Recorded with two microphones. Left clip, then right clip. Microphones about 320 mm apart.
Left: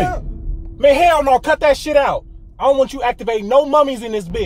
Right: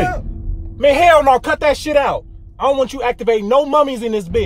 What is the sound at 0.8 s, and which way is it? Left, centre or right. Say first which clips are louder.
A man's voice: right 1 dB; centre.